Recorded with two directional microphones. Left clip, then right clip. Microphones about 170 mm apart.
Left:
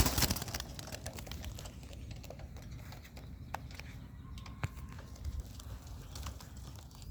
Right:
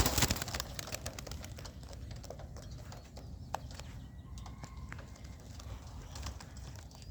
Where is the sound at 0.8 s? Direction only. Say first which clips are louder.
Right 3 dB; 50° right (ahead or behind).